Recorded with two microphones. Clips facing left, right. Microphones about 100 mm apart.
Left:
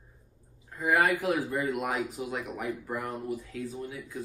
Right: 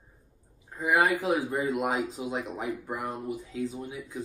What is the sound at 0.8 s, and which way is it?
Speech, 15° right (ahead or behind).